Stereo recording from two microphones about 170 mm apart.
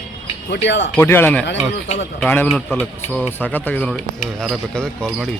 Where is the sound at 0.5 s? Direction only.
90° left.